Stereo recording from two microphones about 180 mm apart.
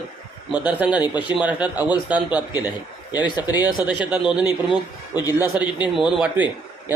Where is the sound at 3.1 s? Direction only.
20° left (ahead or behind).